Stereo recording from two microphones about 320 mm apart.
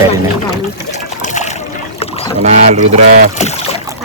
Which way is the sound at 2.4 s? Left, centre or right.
Right.